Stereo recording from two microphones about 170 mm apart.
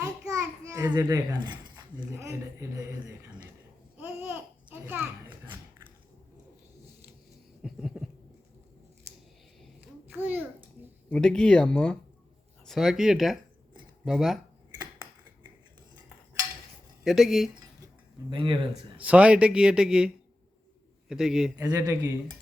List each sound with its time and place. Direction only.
0.0 s a sound: 20° right (ahead or behind)
2.1 s speech: 15° right (ahead or behind)
3.9 s babbling: 10° right (ahead or behind)
7.6 s a sound: centre (ahead or behind)
10.2 s speech: 10° right (ahead or behind)
11.1 s speech: 5° left (ahead or behind)
17.0 s speech: centre (ahead or behind)
18.3 s speech: 30° right (ahead or behind)
18.9 s speech: 10° right (ahead or behind)
21.1 s speech: 5° right (ahead or behind)
21.6 s speech: 20° right (ahead or behind)